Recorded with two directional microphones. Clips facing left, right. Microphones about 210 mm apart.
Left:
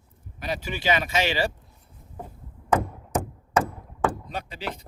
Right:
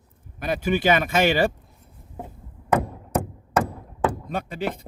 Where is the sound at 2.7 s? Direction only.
60° right (ahead or behind).